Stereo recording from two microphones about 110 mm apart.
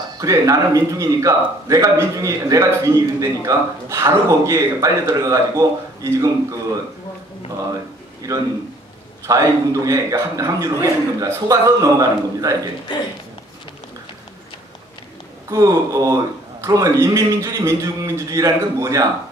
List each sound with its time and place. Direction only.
0.2 s a man's voice: 30° right (ahead or behind)
7.7 s a sound: 30° right (ahead or behind)
9.2 s a man's voice: 30° right (ahead or behind)
15.5 s a man's voice: 30° right (ahead or behind)